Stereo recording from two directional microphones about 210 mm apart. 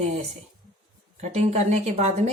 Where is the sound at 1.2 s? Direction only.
35° right (ahead or behind).